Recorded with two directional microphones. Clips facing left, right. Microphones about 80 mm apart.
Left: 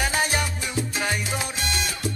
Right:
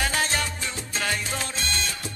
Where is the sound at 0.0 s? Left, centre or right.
Centre.